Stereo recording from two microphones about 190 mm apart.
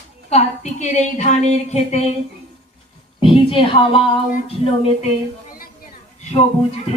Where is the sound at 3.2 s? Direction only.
25° left (ahead or behind).